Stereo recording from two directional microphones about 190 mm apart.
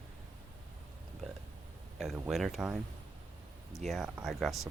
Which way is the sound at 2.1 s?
5° right (ahead or behind).